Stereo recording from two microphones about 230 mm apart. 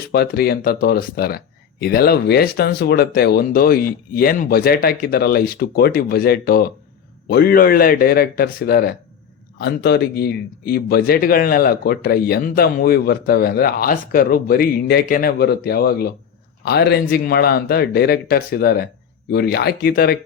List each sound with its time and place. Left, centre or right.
0.1 s speech: left